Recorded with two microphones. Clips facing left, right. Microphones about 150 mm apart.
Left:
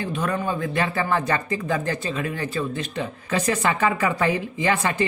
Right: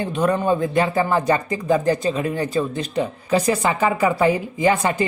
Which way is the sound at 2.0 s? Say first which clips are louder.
Right 6 dB; 30° right (ahead or behind).